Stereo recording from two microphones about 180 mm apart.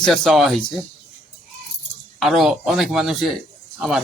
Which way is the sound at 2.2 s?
Centre (ahead or behind).